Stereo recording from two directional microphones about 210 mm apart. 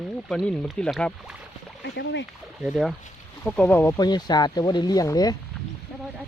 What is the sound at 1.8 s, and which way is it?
Speech, 55° left (ahead or behind).